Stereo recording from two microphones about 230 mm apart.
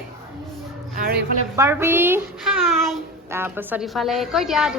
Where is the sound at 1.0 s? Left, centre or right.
Right.